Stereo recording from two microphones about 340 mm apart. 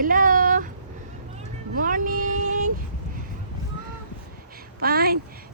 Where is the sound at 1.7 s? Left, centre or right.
Right.